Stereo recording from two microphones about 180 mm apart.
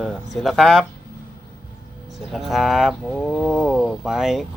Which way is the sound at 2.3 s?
Centre (ahead or behind).